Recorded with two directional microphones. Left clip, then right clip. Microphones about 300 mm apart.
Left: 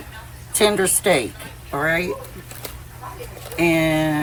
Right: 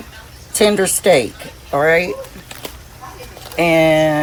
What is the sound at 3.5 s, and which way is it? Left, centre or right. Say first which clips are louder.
Speech: right 6 dB; right.